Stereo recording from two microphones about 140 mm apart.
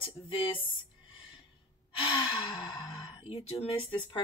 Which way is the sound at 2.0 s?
35° left (ahead or behind).